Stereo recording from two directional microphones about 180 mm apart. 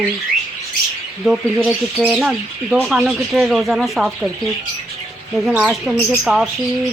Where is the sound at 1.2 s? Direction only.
5° right (ahead or behind).